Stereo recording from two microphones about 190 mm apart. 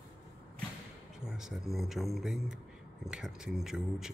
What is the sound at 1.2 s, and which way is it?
Speech, 5° right (ahead or behind).